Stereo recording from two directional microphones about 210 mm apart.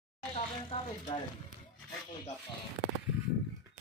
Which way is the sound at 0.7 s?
20° left (ahead or behind).